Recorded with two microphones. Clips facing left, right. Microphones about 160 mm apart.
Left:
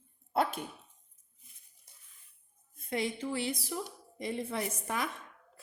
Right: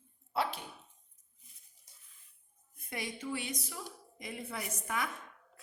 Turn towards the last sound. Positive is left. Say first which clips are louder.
# left 3 dB
turn(degrees=25)  # may be behind; listen again after turning